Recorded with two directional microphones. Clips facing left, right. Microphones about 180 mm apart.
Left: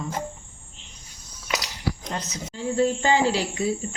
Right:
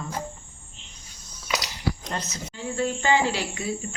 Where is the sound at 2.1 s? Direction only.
15° left (ahead or behind).